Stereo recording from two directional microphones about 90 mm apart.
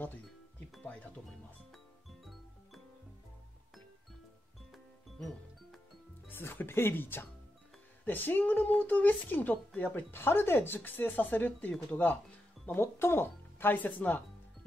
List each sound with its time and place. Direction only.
1.7 s music: centre (ahead or behind)
6.2 s speech: 25° left (ahead or behind)